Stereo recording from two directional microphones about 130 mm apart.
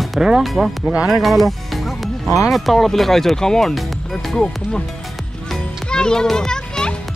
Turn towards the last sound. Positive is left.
turn(degrees=5)  # may be behind; listen again after turning